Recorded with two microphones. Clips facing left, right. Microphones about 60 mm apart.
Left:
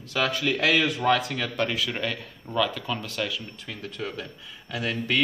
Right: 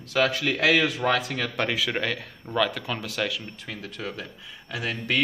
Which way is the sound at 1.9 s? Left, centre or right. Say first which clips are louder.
Right 2 dB; right.